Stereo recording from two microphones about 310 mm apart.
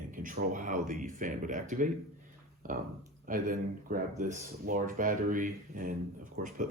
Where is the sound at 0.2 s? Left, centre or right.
Right.